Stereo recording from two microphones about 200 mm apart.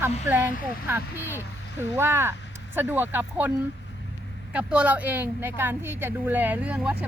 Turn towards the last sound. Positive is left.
turn(degrees=-5)  # may be behind; listen again after turning